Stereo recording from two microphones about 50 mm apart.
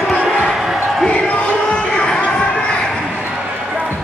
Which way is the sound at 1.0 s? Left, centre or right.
Left.